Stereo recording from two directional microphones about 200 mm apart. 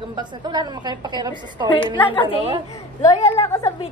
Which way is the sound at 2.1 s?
25° left (ahead or behind).